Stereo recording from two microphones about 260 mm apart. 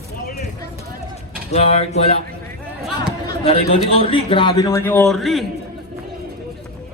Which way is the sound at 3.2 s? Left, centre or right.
Left.